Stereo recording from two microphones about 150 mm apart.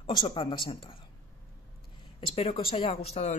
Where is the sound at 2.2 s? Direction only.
35° left (ahead or behind).